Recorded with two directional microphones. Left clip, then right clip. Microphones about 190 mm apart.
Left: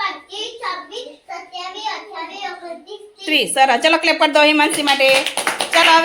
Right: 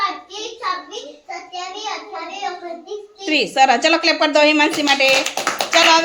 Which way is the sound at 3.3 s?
5° right (ahead or behind).